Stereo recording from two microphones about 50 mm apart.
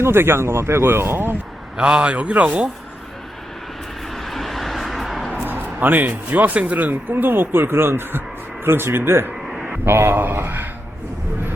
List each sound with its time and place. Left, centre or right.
0.0 s speech: right
1.7 s a man's voice: centre
4.2 s vehicle: centre
5.3 s a man's voice: right
9.5 s a sound: centre
9.8 s a man's voice: right